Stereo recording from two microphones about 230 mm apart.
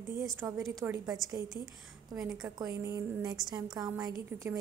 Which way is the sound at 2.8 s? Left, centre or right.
Centre.